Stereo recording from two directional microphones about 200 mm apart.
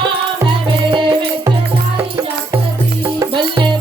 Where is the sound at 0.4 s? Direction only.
25° right (ahead or behind).